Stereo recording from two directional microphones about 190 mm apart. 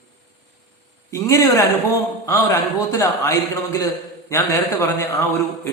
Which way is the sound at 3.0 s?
15° left (ahead or behind).